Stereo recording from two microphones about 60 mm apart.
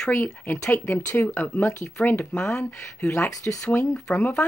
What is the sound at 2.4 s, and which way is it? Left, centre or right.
Speech, centre.